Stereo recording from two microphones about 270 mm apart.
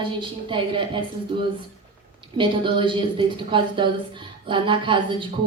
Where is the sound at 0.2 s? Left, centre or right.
Centre.